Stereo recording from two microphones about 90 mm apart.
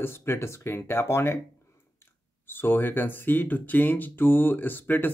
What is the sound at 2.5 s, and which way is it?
Speech, 25° left (ahead or behind).